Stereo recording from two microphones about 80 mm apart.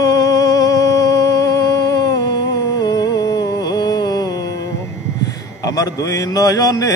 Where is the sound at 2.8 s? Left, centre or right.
Left.